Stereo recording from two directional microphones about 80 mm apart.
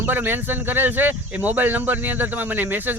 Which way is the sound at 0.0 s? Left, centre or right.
Right.